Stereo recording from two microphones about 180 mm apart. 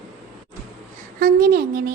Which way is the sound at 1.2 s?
50° right (ahead or behind).